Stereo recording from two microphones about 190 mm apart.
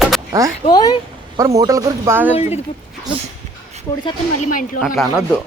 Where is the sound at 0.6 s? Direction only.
20° left (ahead or behind).